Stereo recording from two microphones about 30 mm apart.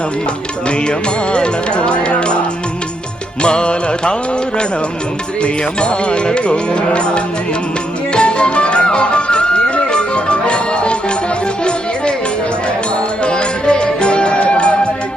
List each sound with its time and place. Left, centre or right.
0.9 s music: left
3.4 s music: left
5.4 s music: left
13.2 s music: left